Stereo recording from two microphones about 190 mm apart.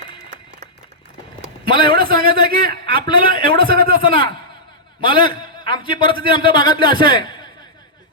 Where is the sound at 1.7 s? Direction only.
25° left (ahead or behind).